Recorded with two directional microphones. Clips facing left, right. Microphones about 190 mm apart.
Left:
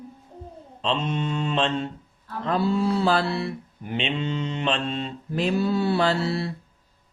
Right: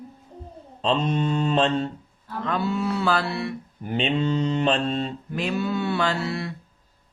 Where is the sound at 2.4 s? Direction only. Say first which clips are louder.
Left 3 dB; 30° left (ahead or behind).